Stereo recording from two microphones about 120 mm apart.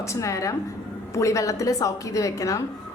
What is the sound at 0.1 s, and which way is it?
Speech, 25° left (ahead or behind).